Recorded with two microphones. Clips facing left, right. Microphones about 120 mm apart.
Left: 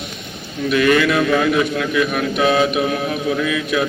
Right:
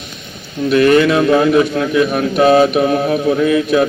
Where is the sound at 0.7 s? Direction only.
35° right (ahead or behind).